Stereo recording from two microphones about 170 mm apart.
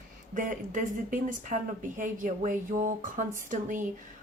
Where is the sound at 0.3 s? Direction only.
50° right (ahead or behind).